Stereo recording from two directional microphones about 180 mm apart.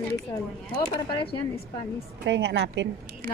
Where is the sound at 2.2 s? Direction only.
75° right (ahead or behind).